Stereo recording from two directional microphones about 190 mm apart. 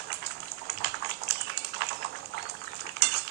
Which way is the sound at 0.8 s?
60° right (ahead or behind).